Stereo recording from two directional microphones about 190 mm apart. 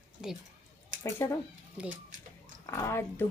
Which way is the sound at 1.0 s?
15° left (ahead or behind).